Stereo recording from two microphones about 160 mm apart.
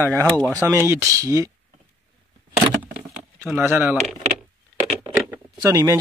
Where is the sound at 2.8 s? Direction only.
10° right (ahead or behind).